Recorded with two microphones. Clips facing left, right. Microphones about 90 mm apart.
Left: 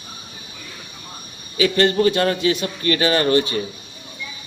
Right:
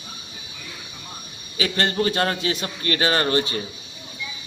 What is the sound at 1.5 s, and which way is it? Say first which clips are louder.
A man's voice: left 6 dB; 30° right (ahead or behind).